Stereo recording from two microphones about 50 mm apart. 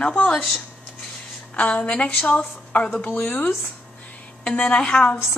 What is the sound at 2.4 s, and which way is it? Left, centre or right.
Speech, left.